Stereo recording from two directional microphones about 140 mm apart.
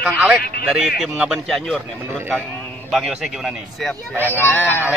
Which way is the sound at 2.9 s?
Centre (ahead or behind).